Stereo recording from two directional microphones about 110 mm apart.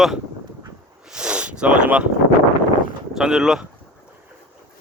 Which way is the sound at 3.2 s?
5° right (ahead or behind).